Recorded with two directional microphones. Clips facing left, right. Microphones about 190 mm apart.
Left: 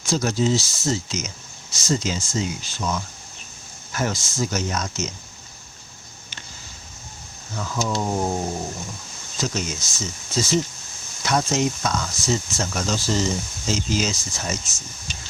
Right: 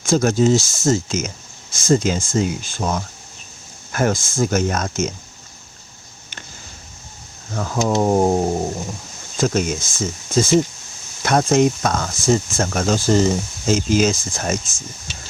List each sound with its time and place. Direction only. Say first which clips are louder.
0.0 s speech: right 6 dB; 50° right (ahead or behind)
7.5 s speech: right 6 dB; 50° right (ahead or behind)
9.4 s speech: right 8 dB; 50° right (ahead or behind)